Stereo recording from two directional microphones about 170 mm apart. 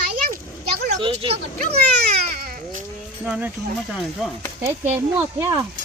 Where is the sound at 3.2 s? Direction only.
10° right (ahead or behind).